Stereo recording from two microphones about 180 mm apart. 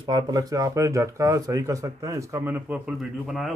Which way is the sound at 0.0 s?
20° right (ahead or behind).